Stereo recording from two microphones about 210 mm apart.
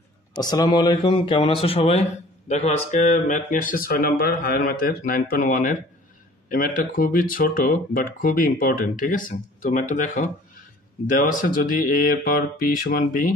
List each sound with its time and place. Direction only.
0.3 s a man's voice: 20° left (ahead or behind); by 13.3 s 40° left (ahead or behind)